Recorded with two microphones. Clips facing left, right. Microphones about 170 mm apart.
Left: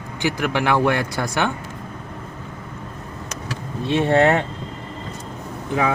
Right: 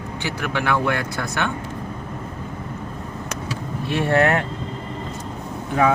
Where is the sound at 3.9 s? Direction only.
25° left (ahead or behind).